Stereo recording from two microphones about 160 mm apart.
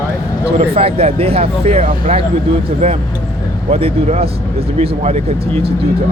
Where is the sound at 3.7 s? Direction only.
40° right (ahead or behind).